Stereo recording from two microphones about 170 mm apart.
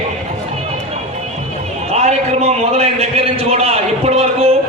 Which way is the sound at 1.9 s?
40° right (ahead or behind).